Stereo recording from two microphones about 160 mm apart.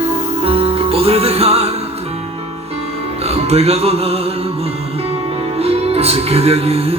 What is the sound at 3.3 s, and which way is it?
Music, 40° right (ahead or behind).